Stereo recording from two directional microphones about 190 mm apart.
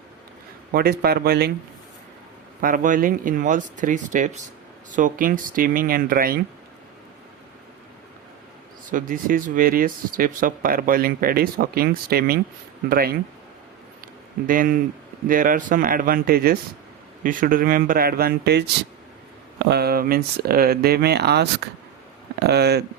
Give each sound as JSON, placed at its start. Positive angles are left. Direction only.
{"t": 0.7, "sound": "speech", "side_deg": -55}
{"t": 2.6, "sound": "speech", "side_deg": -45}
{"t": 8.9, "sound": "speech", "side_deg": -45}
{"t": 14.0, "sound": "a sound", "side_deg": -45}
{"t": 15.3, "sound": "speech", "side_deg": -45}